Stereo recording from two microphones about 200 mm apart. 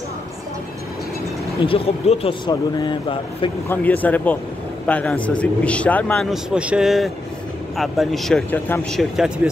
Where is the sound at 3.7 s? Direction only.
10° left (ahead or behind).